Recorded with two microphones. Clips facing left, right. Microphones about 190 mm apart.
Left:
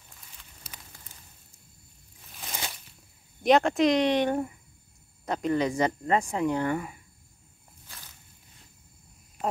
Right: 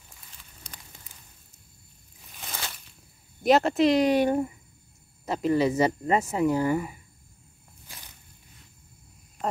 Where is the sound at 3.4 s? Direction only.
5° right (ahead or behind).